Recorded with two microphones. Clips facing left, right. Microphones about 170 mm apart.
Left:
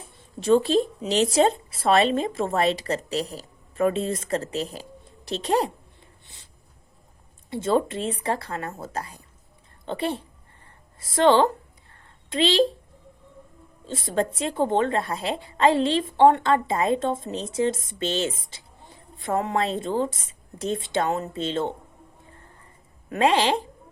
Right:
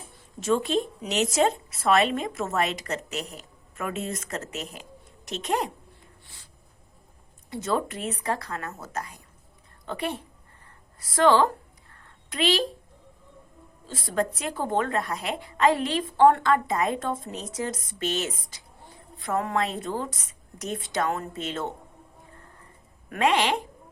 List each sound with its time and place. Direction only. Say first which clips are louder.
0.3 s speech: left 5 dB; 30° left (ahead or behind)
6.2 s a sound: even; 20° left (ahead or behind)
7.5 s a woman's voice: left 5 dB; 25° left (ahead or behind)
11.0 s a sound: left 2 dB; 25° left (ahead or behind)
13.8 s speech: left 2 dB; 25° left (ahead or behind)
23.0 s speech: left 3 dB; 30° left (ahead or behind)